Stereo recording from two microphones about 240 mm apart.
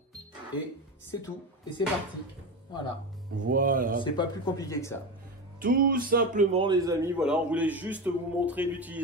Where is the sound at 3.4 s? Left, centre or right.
Right.